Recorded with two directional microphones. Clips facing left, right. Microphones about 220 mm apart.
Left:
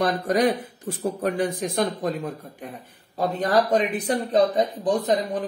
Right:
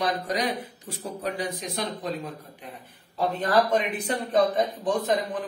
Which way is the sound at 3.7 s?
35° left (ahead or behind).